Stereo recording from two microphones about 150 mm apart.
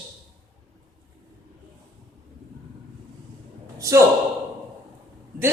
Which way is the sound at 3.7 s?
20° right (ahead or behind).